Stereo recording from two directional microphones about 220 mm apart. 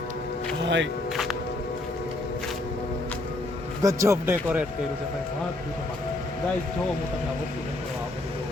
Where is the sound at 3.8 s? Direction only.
15° right (ahead or behind).